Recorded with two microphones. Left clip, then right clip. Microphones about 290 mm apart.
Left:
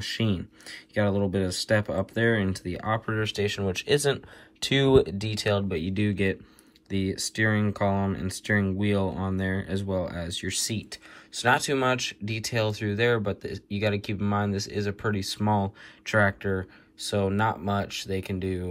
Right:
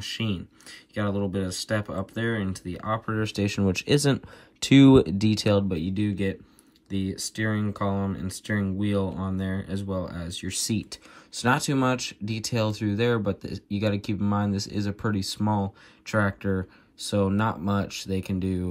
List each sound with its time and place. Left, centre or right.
0.0 s speech: centre
17.0 s speech: centre